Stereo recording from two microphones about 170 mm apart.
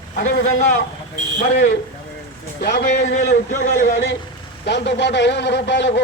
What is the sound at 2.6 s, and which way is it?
Speech, 90° left.